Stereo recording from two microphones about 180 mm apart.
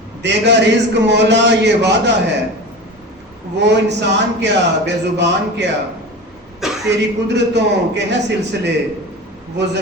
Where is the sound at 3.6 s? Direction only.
75° right (ahead or behind).